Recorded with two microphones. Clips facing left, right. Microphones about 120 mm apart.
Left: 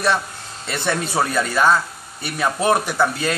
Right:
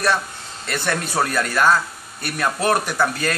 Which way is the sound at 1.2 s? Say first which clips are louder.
Even; 5° left (ahead or behind).